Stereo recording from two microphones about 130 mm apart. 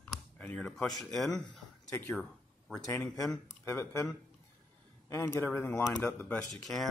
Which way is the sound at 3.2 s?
25° left (ahead or behind).